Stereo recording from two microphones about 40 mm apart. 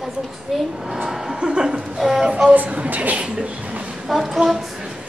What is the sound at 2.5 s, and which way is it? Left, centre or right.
Speech, right.